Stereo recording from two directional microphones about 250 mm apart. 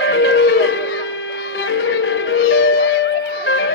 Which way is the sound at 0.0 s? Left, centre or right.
Left.